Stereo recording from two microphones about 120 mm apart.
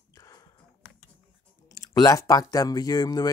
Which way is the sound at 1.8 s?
30° left (ahead or behind).